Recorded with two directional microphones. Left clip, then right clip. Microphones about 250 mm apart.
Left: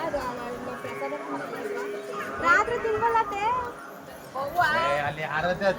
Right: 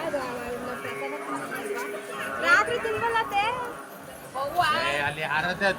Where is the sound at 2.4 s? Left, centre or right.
Left.